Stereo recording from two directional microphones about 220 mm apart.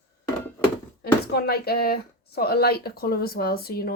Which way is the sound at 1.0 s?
45° left (ahead or behind).